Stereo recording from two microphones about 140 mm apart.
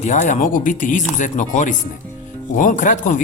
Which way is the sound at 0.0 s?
60° left (ahead or behind).